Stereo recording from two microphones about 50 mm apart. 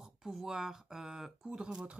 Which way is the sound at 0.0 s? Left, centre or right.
Centre.